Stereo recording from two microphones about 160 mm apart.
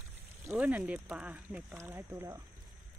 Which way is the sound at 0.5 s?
10° right (ahead or behind).